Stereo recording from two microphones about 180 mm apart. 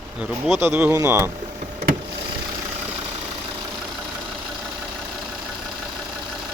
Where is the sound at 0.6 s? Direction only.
10° right (ahead or behind).